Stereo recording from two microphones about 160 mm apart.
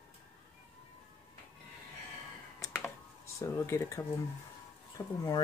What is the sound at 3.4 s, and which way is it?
Speech, 20° left (ahead or behind).